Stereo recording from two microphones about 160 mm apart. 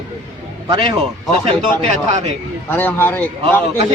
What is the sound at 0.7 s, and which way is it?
Speech, 30° right (ahead or behind).